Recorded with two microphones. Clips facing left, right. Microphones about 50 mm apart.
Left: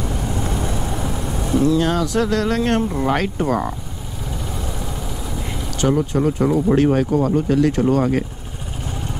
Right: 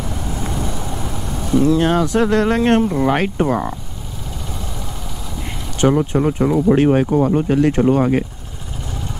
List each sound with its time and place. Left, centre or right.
0.1 s vehicle: centre
1.6 s speech: right
2.8 s speech: centre
3.2 s speech: right
5.8 s speech: right